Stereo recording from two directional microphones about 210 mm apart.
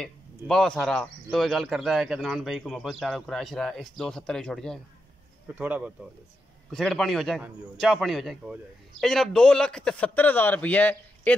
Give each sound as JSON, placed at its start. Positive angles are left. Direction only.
{"t": 0.5, "sound": "speech", "side_deg": 5}
{"t": 5.5, "sound": "a man's voice", "side_deg": -10}